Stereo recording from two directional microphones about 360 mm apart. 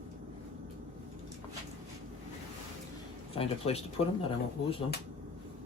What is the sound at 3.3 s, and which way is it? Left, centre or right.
Speech, centre.